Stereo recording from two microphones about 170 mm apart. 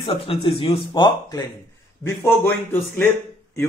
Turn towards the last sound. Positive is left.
turn(degrees=15)  # may be behind; listen again after turning